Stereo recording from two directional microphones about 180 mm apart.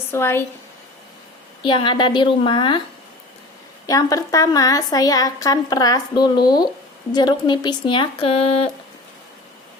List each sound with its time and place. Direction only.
0.1 s speech: 15° left (ahead or behind)
1.6 s a woman's voice: 25° left (ahead or behind)
3.8 s a woman's voice: 20° left (ahead or behind)